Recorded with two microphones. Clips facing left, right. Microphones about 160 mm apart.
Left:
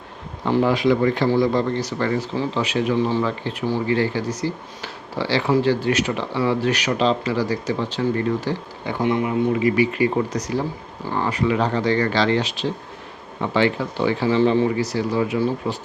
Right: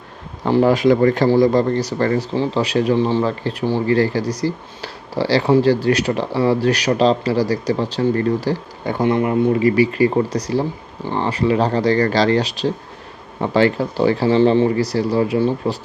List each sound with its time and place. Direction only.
0.4 s speech: 40° right (ahead or behind)